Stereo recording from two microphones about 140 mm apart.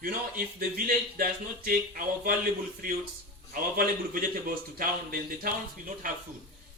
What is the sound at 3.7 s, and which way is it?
Speech, 90° right.